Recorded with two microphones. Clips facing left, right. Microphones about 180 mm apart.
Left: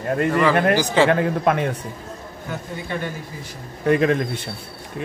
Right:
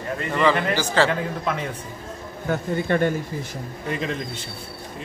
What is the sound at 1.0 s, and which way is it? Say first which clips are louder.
Speech: left 6 dB; 60° left (ahead or behind).